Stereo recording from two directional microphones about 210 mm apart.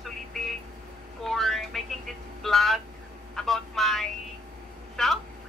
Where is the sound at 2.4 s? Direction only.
Centre (ahead or behind).